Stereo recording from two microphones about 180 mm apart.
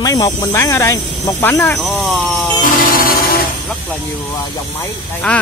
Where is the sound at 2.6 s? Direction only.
55° left (ahead or behind).